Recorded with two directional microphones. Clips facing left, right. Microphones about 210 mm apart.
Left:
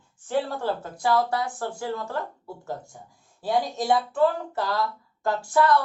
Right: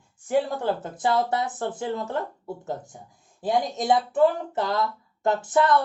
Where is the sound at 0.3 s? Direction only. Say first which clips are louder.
Right 2 dB; 20° right (ahead or behind).